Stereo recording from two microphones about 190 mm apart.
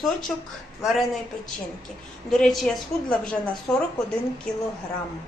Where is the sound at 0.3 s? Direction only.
Centre (ahead or behind).